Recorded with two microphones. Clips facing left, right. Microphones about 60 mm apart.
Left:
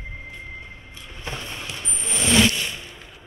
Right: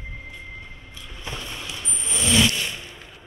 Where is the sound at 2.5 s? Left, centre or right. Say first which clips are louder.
Even; centre.